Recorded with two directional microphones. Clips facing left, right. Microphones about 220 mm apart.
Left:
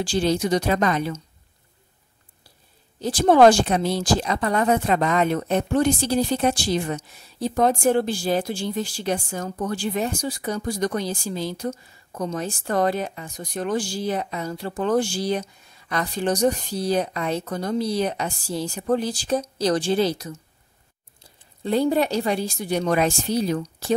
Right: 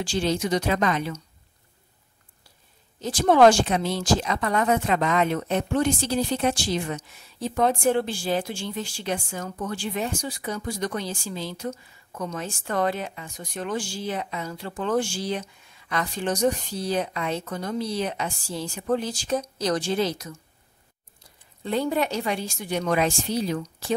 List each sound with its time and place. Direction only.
0.0 s speech: 35° left (ahead or behind)
3.0 s speech: 35° left (ahead or behind)
21.6 s speech: 35° left (ahead or behind)